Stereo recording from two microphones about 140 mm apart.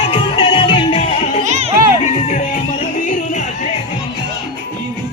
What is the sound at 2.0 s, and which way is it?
Music, 60° left (ahead or behind).